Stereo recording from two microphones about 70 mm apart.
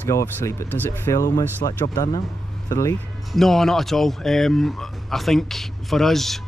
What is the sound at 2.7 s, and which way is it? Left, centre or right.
Speech, left.